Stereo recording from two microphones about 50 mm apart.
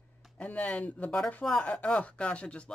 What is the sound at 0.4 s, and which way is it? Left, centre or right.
Speech, left.